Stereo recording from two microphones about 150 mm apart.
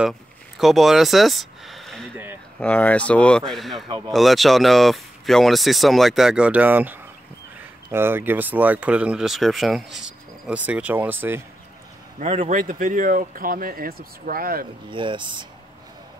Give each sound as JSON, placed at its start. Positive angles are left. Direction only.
{"t": 0.6, "sound": "speech", "side_deg": 0}
{"t": 12.2, "sound": "a man's voice", "side_deg": -45}
{"t": 12.5, "sound": "speech", "side_deg": -60}
{"t": 14.9, "sound": "speech", "side_deg": -35}